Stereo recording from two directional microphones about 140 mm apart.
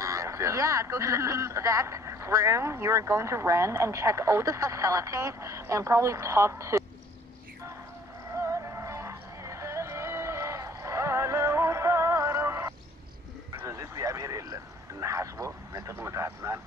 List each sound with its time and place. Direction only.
0.0 s speech: 20° right (ahead or behind)
8.4 s music: 20° right (ahead or behind)
13.6 s vehicle: 20° right (ahead or behind)